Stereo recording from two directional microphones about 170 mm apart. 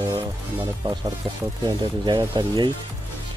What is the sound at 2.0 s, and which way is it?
Speech, 25° right (ahead or behind).